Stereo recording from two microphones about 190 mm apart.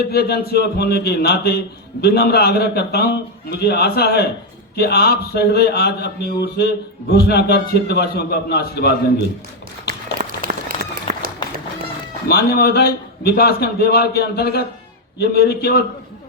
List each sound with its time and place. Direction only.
0.1 s a man's voice: 55° left (ahead or behind)
9.8 s applause: 50° right (ahead or behind)
12.3 s a man's voice: 55° left (ahead or behind)